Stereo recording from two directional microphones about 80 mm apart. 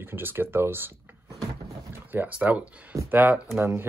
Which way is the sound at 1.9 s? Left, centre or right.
Right.